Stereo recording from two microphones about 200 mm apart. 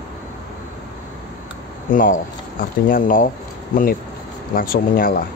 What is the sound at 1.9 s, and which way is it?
Speech, 40° left (ahead or behind).